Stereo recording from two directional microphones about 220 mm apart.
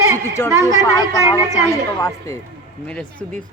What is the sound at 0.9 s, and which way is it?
Speech, 15° left (ahead or behind).